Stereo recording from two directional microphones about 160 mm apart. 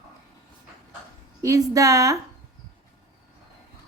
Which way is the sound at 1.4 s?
20° right (ahead or behind).